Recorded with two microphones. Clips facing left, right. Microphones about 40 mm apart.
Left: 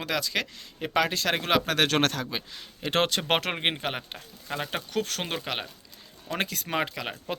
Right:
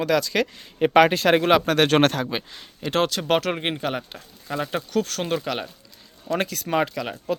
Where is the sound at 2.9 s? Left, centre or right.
Left.